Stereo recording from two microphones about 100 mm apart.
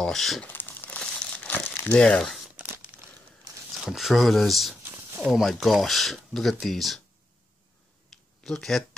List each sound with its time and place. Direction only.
0.0 s speech: centre (ahead or behind)
0.5 s crumpling: 20° left (ahead or behind)
1.9 s speech: 10° left (ahead or behind)
2.5 s crumpling: 15° right (ahead or behind)
3.7 s speech: centre (ahead or behind)
4.9 s a sound: 15° right (ahead or behind)
5.3 s speech: centre (ahead or behind)
8.1 s a sound: centre (ahead or behind)
8.5 s speech: 5° left (ahead or behind)